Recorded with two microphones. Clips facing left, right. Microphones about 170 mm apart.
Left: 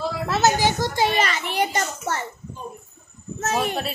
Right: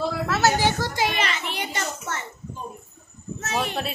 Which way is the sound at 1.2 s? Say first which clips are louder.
Left 5 dB; 45° left (ahead or behind).